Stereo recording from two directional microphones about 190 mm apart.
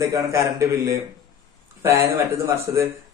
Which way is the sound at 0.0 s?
15° right (ahead or behind).